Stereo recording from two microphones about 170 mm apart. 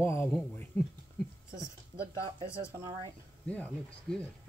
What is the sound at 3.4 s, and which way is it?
Speech, 10° left (ahead or behind).